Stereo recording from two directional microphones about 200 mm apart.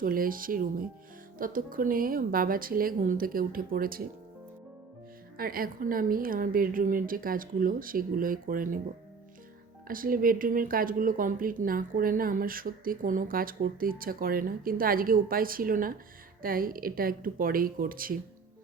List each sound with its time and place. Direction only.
0.0 s speech: 45° right (ahead or behind)
5.4 s speech: 45° right (ahead or behind)
9.8 s speech: 45° right (ahead or behind)